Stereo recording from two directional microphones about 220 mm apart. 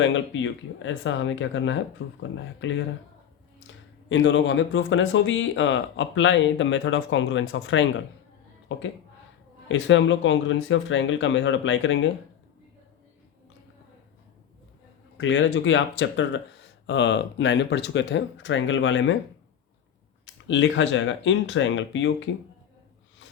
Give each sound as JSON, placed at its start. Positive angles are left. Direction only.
{"t": 0.0, "sound": "speech", "side_deg": 60}
{"t": 4.1, "sound": "speech", "side_deg": 55}
{"t": 15.2, "sound": "speech", "side_deg": 55}
{"t": 20.2, "sound": "speech", "side_deg": 60}